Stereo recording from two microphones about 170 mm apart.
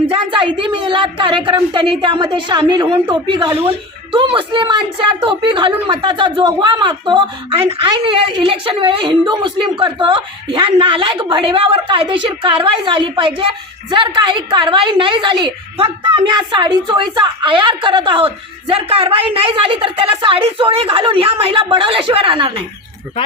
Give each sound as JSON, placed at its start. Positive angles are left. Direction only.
{"t": 0.1, "sound": "a woman's voice", "side_deg": -30}